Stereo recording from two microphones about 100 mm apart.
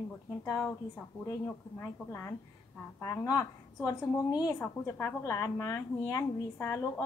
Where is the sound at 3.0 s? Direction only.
35° left (ahead or behind).